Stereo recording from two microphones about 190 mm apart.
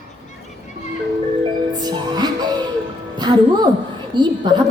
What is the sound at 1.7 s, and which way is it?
Music, 20° right (ahead or behind).